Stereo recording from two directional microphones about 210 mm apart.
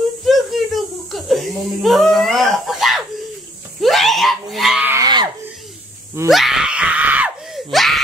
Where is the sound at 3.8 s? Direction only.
Centre (ahead or behind); by 5.2 s 20° right (ahead or behind).